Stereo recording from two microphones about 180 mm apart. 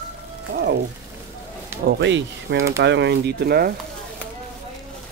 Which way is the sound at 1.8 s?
75° right (ahead or behind).